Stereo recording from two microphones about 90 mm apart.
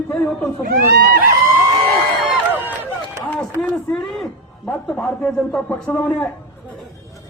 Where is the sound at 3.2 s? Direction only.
15° left (ahead or behind).